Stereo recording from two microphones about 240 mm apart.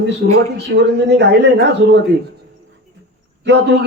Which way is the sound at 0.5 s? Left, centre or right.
Right.